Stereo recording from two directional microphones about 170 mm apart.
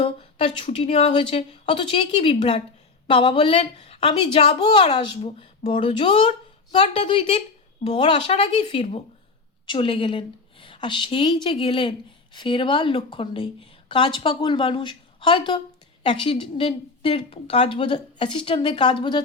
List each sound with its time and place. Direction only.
0.0 s a woman's voice: 35° left (ahead or behind)